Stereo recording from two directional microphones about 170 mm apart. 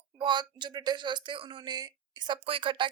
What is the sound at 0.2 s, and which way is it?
A woman's voice, 25° right (ahead or behind).